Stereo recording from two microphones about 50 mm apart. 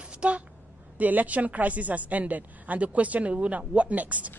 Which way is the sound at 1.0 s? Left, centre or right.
Right.